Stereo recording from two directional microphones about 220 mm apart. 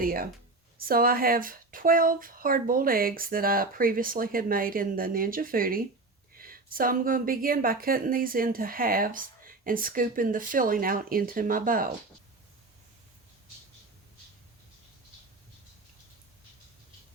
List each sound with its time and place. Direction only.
0.0 s a woman's voice: 40° right (ahead or behind)